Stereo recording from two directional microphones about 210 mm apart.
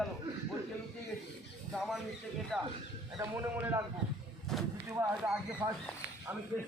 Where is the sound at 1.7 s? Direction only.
Centre (ahead or behind).